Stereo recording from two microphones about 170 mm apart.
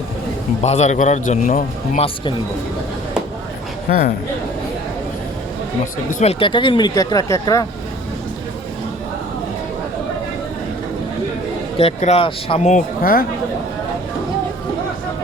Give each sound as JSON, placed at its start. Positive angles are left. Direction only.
{"t": 0.6, "sound": "a man's voice", "side_deg": 40}
{"t": 3.8, "sound": "a man's voice", "side_deg": 55}
{"t": 6.1, "sound": "a man's voice", "side_deg": 45}
{"t": 6.4, "sound": "speech", "side_deg": 30}
{"t": 11.8, "sound": "speech", "side_deg": 40}
{"t": 13.0, "sound": "speech", "side_deg": 60}